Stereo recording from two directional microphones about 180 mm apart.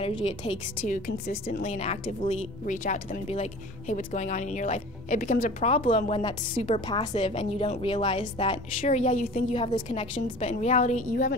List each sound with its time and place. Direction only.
0.0 s a woman's voice: 30° left (ahead or behind)
0.7 s a woman's voice: 50° left (ahead or behind)